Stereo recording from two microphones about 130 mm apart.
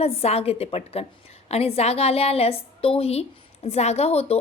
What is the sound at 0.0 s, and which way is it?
A woman's voice, 50° left (ahead or behind).